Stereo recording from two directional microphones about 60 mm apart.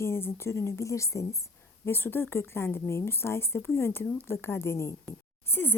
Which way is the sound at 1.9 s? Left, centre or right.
Left.